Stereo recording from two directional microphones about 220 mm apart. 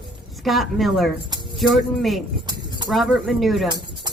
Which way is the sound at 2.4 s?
20° right (ahead or behind).